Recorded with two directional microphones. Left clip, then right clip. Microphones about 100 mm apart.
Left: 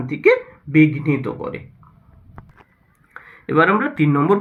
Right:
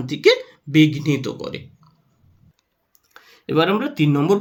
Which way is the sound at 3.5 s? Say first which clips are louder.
Left 3 dB; 40° right (ahead or behind).